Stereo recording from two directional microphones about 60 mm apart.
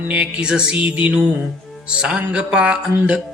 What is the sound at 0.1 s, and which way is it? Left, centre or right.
Mantra, right.